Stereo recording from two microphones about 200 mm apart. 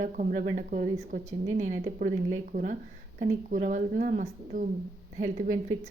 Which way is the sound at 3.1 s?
45° right (ahead or behind).